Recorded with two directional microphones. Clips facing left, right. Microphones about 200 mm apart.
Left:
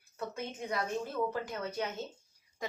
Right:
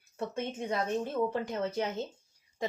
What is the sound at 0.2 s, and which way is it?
A woman's voice, 25° right (ahead or behind).